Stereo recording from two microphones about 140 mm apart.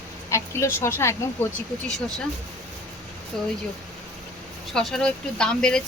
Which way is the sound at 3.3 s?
Centre (ahead or behind).